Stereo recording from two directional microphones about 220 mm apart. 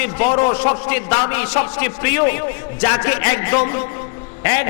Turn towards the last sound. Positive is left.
turn(degrees=15)  # may be behind; listen again after turning